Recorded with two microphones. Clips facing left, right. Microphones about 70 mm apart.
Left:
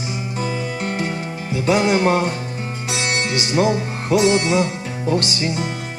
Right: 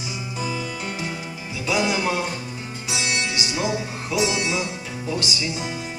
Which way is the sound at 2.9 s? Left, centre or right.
Left.